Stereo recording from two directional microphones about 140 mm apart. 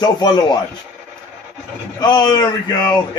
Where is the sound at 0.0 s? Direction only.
30° left (ahead or behind).